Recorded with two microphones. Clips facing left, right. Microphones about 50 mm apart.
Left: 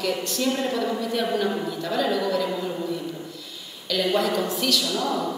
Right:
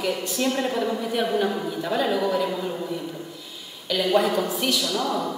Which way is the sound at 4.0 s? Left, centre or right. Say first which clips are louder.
Right 2 dB; centre.